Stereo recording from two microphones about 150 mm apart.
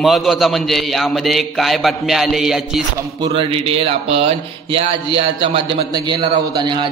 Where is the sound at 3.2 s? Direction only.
30° right (ahead or behind).